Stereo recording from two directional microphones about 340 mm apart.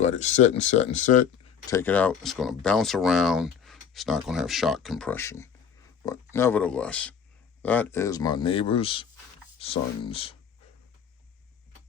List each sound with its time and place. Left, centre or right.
0.2 s speech: left
1.7 s speech: centre